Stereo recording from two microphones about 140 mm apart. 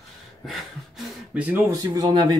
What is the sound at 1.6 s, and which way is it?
Speech, 25° right (ahead or behind).